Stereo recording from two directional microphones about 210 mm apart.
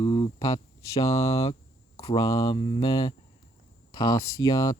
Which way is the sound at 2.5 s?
30° left (ahead or behind).